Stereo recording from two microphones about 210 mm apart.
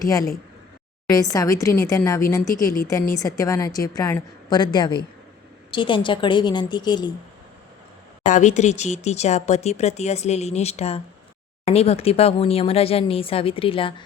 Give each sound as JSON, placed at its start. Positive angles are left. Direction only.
{"t": 1.1, "sound": "a woman's voice", "side_deg": 15}
{"t": 8.2, "sound": "speech", "side_deg": 35}